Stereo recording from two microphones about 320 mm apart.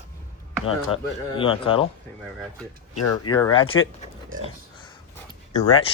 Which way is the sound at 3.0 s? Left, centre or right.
Left.